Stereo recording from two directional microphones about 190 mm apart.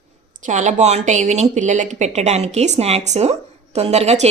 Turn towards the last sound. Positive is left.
turn(degrees=-35)  # may be behind; listen again after turning